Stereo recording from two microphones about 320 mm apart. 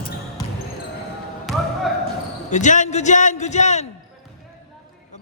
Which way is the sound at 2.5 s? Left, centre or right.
Left.